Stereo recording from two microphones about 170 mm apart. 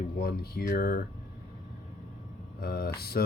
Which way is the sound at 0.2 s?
65° left (ahead or behind).